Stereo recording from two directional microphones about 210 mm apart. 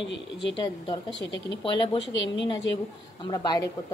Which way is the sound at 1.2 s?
55° left (ahead or behind).